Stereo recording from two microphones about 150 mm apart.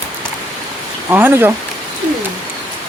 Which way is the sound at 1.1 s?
15° right (ahead or behind).